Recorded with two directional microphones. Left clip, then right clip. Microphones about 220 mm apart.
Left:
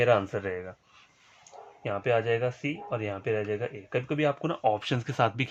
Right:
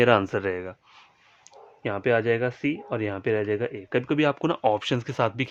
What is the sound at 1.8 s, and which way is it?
Speech, 55° right (ahead or behind).